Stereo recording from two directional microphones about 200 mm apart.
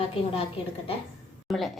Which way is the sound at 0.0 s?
30° left (ahead or behind).